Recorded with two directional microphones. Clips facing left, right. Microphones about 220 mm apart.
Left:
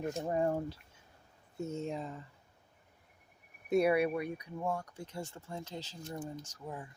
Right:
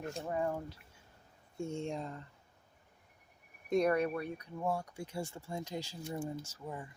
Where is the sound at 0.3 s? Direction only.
35° left (ahead or behind).